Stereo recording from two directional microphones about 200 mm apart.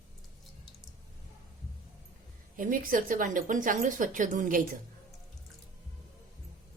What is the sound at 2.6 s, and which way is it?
A woman's voice, 45° right (ahead or behind).